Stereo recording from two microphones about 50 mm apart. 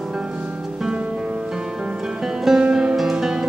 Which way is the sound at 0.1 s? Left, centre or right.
Centre.